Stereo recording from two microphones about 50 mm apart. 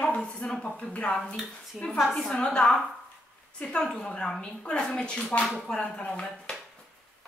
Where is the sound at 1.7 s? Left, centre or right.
Centre.